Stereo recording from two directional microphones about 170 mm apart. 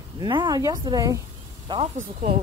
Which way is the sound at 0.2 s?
25° right (ahead or behind).